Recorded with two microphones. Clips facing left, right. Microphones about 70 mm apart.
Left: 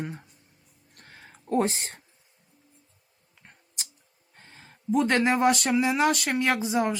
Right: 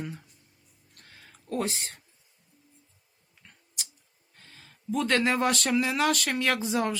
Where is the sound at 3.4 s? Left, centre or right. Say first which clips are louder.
Even; left.